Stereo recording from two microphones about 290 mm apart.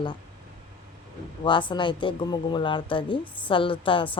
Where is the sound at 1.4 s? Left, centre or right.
Centre.